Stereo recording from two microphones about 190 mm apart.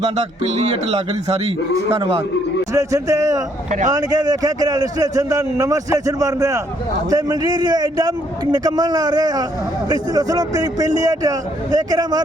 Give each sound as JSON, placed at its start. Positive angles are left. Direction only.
{"t": 0.5, "sound": "a man's voice", "side_deg": -35}
{"t": 2.7, "sound": "a man's voice", "side_deg": -15}
{"t": 3.7, "sound": "a man's voice", "side_deg": -40}
{"t": 3.9, "sound": "a man's voice", "side_deg": -20}